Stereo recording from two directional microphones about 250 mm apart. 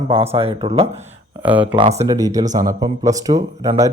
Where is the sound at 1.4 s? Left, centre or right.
Centre.